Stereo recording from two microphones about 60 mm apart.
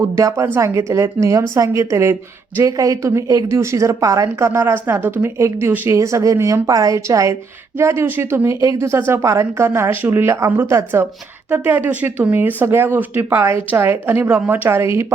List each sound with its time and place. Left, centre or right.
0.6 s speech: right
2.6 s speech: right
3.6 s speech: right
4.6 s a woman's voice: right
5.4 s speech: right
7.8 s speech: right
9.6 s a woman's voice: right
11.4 s a woman's voice: right
13.1 s a woman's voice: right
14.7 s speech: right